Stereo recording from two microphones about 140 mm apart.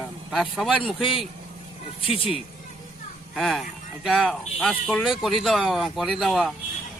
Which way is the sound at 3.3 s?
Centre (ahead or behind).